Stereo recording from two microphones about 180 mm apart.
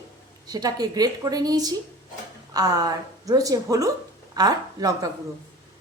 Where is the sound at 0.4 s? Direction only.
20° right (ahead or behind).